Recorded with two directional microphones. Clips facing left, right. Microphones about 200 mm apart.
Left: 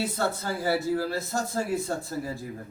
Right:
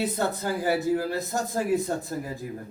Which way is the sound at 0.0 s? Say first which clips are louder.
Right 2 dB; 20° right (ahead or behind).